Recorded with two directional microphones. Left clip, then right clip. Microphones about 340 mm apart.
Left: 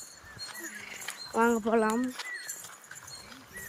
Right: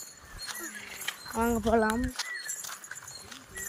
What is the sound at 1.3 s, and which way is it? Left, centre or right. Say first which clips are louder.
Speech: left 1 dB; centre.